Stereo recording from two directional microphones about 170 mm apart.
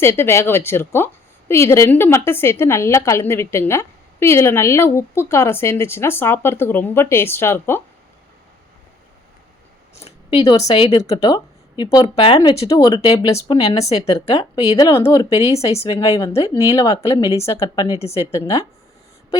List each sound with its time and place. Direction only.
0.0 s a woman's voice: 15° left (ahead or behind)
10.0 s speech: 30° left (ahead or behind)
13.5 s speech: 35° left (ahead or behind)
15.4 s speech: 35° left (ahead or behind)
15.9 s speech: 25° left (ahead or behind)
18.3 s speech: 20° left (ahead or behind)